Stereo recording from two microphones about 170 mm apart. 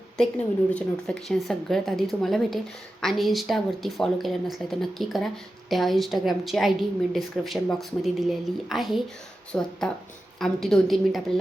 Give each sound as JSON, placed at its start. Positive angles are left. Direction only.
{"t": 0.2, "sound": "speech", "side_deg": 5}